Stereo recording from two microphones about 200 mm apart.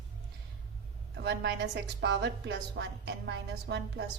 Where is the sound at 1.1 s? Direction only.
60° right (ahead or behind).